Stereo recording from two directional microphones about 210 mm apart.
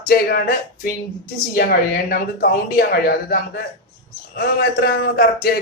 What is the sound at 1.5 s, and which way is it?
Speech, 45° left (ahead or behind).